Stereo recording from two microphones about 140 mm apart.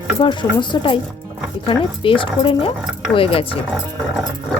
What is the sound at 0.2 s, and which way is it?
Speech, 35° left (ahead or behind).